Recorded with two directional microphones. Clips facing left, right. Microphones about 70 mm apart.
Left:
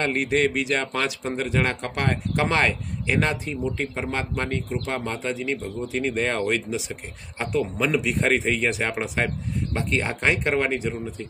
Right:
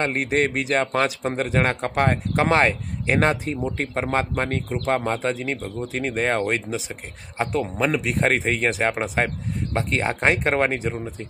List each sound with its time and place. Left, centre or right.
0.0 s speech: right